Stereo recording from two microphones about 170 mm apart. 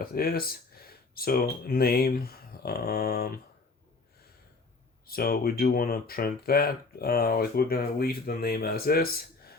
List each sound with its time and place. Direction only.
0.0 s speech: 60° left (ahead or behind)
5.0 s speech: 60° left (ahead or behind)